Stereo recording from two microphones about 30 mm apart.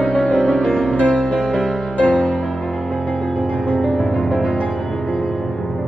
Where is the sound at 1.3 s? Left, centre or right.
Left.